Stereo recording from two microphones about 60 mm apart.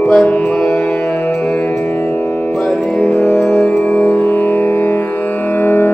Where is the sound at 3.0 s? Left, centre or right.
Left.